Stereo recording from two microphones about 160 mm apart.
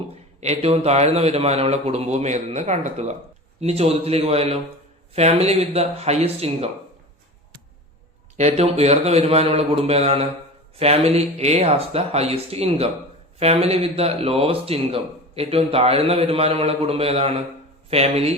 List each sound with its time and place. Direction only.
0.3 s a man's voice: 40° right (ahead or behind)
8.4 s speech: 40° right (ahead or behind)